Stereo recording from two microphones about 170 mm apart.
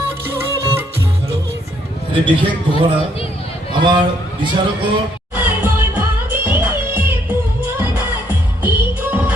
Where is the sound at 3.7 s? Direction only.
25° right (ahead or behind).